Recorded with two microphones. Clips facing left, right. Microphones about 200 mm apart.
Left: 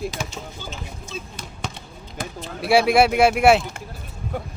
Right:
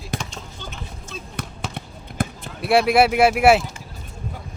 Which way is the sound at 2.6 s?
Centre (ahead or behind).